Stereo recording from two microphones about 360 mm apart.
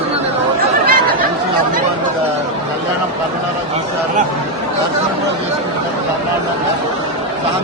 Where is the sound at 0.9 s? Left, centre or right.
Right.